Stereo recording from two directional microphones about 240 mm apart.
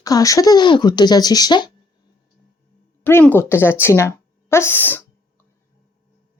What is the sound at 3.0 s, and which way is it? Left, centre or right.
Speech, centre.